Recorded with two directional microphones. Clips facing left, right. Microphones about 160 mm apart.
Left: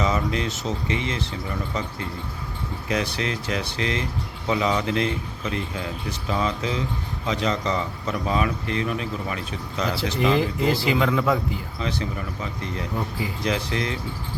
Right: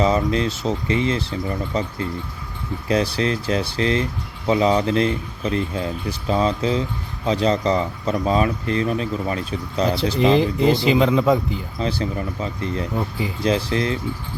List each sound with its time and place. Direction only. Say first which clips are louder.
0.0 s speech: right 5 dB; 35° right (ahead or behind)
2.9 s speech: right 6 dB; 35° right (ahead or behind)
10.1 s speech: right 4 dB; 25° right (ahead or behind)
11.8 s speech: right 6 dB; 35° right (ahead or behind)